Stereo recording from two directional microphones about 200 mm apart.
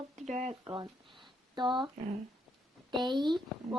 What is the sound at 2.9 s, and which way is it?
Speech, 20° right (ahead or behind).